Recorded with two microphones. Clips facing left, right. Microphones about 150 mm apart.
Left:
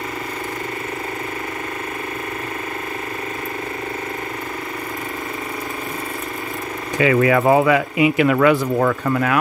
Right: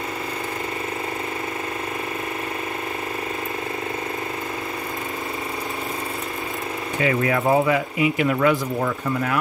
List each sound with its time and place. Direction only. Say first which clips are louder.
7.0 s speech: left 6 dB; 90° left